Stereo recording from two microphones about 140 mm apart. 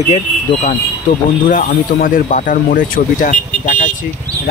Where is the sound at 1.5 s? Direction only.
70° left (ahead or behind).